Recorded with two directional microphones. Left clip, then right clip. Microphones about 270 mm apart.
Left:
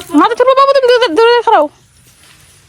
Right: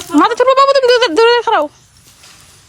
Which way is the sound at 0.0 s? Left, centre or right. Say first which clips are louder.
Left 1 dB; centre.